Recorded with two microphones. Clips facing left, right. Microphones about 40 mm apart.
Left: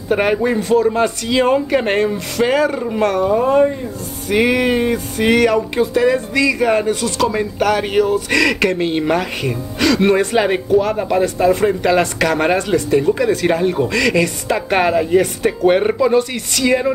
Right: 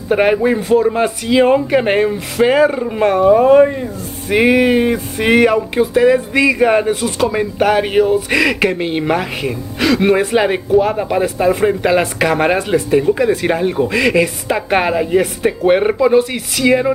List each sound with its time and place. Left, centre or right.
0.1 s speech: centre
6.3 s speech: right; by 16.9 s centre